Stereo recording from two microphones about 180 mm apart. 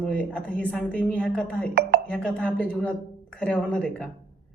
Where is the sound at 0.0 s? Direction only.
5° left (ahead or behind).